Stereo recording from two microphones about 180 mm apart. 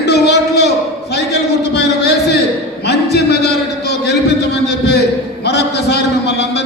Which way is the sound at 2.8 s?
65° left (ahead or behind).